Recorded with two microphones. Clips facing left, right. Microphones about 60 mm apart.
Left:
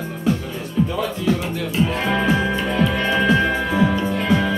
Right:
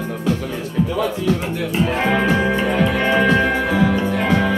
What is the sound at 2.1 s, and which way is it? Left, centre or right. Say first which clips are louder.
Music: right 2 dB; right.